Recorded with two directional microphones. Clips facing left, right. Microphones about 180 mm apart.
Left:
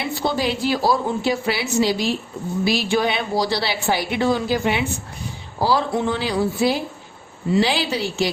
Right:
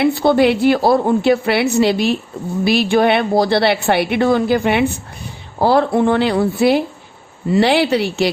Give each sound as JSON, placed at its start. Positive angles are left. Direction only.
{"t": 0.0, "sound": "a woman's voice", "side_deg": -60}